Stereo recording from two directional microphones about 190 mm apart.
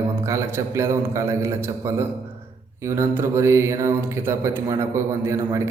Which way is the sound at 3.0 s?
15° right (ahead or behind).